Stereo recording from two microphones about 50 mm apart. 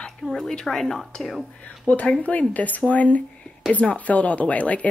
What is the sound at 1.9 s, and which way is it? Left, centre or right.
Speech, left.